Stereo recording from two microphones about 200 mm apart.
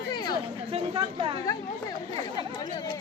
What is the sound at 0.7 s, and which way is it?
Speech, 25° right (ahead or behind).